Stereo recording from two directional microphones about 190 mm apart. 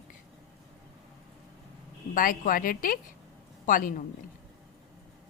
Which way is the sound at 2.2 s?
45° left (ahead or behind).